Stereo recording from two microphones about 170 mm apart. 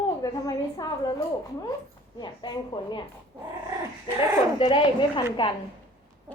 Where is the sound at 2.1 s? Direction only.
25° left (ahead or behind).